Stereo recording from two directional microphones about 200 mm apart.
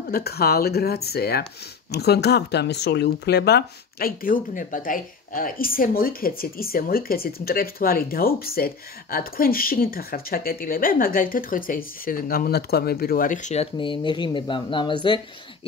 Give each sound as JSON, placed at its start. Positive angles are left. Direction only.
{"t": 0.1, "sound": "speech", "side_deg": 50}